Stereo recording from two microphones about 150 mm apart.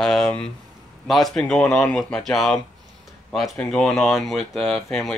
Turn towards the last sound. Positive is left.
turn(degrees=0)  # may be behind; listen again after turning